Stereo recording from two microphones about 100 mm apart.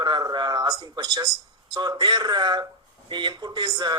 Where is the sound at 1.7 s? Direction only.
45° right (ahead or behind).